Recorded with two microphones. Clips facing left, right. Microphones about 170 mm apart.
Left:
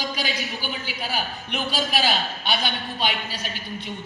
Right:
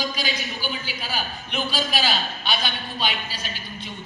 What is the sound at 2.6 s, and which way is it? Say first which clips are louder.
A woman's voice: left 2 dB; 60° left (ahead or behind).